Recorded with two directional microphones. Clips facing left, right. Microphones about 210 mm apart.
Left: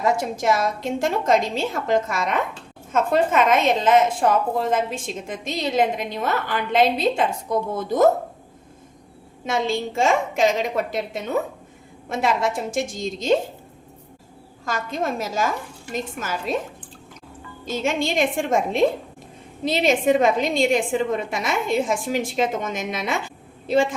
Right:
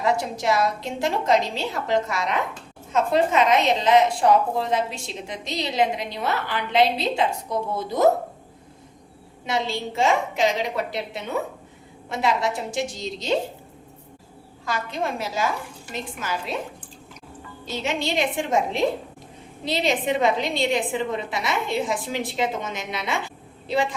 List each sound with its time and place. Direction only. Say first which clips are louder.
0.0 s a woman's voice: left 2 dB; 45° left (ahead or behind)
9.5 s a woman's voice: left 3 dB; 50° left (ahead or behind)
14.6 s a woman's voice: left 2 dB; 45° left (ahead or behind)
16.5 s a woman's voice: left 7 dB; 45° left (ahead or behind)
17.7 s a woman's voice: left 3 dB; 50° left (ahead or behind)